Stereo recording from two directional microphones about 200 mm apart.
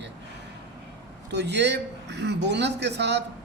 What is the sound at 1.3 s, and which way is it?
A man's voice, 60° right (ahead or behind).